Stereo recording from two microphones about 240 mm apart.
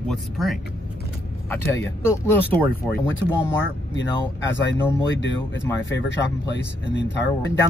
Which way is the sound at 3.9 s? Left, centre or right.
Left.